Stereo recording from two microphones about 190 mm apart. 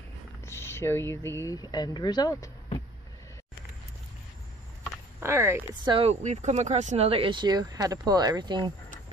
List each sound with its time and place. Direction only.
0.5 s speech: 15° left (ahead or behind)
5.2 s speech: 15° right (ahead or behind)
5.9 s speech: 30° right (ahead or behind)